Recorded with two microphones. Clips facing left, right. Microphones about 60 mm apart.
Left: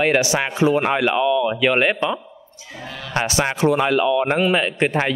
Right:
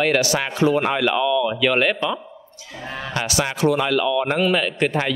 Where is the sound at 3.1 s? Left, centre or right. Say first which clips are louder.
Left 3 dB; left.